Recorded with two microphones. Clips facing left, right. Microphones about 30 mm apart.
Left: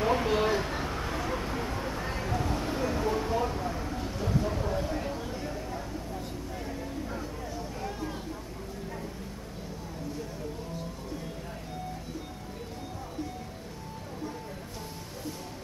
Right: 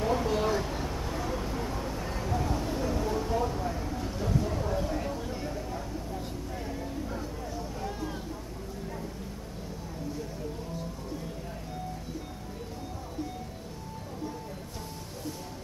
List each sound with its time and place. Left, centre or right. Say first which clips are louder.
0.0 s vehicle: left 2 dB; left; by 8.2 s centre